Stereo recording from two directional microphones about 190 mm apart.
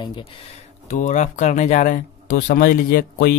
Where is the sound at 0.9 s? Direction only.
40° left (ahead or behind).